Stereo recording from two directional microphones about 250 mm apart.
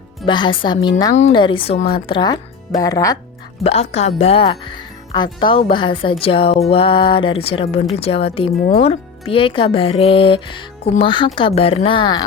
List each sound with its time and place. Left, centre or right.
0.3 s speech: centre
3.6 s speech: left